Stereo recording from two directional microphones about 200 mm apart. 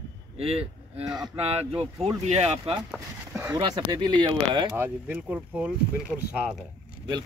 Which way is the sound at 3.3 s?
15° right (ahead or behind).